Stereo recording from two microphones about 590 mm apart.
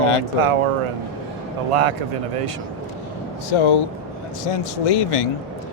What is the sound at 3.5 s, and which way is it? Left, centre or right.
Speech, left.